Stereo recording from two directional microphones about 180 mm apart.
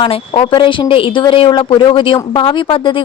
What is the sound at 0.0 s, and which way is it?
Speech, 30° left (ahead or behind).